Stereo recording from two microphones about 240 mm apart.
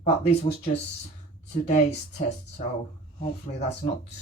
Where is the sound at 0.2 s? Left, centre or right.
Left.